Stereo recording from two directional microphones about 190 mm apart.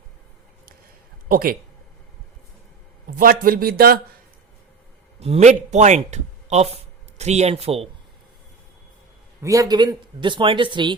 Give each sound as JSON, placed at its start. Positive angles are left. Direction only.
{"t": 1.3, "sound": "speech", "side_deg": -50}
{"t": 3.2, "sound": "speech", "side_deg": -50}
{"t": 5.2, "sound": "a man's voice", "side_deg": -35}
{"t": 9.4, "sound": "speech", "side_deg": -20}